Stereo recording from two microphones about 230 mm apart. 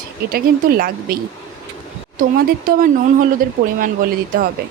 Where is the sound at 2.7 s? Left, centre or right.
Right.